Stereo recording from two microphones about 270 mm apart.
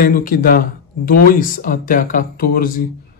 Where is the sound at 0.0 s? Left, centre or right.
Left.